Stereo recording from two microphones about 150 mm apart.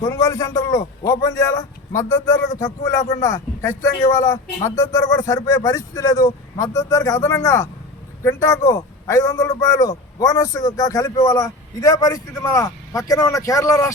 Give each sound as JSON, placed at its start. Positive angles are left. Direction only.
{"t": 0.0, "sound": "a man's voice", "side_deg": 25}